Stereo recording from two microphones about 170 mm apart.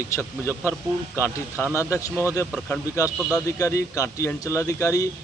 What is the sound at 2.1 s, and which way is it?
Speech, 10° right (ahead or behind).